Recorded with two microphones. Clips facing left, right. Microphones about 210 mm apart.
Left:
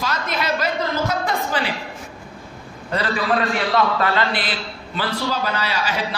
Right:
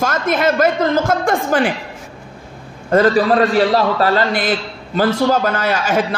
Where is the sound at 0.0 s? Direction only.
50° right (ahead or behind).